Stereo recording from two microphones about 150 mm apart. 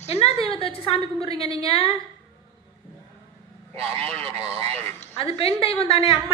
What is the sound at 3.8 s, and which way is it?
Speech, 40° right (ahead or behind).